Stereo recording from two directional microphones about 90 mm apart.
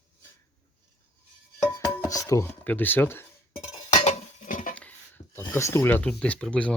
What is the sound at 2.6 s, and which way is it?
Speech, 20° left (ahead or behind).